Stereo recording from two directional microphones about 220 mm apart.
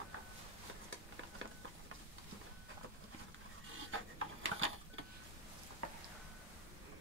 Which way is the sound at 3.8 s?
65° right (ahead or behind).